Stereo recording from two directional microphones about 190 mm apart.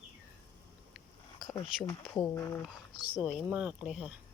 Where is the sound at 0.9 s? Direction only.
Centre (ahead or behind).